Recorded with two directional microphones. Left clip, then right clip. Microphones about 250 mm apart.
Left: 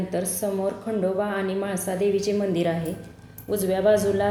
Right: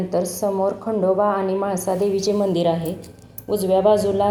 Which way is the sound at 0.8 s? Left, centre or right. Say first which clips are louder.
Right 9 dB; right.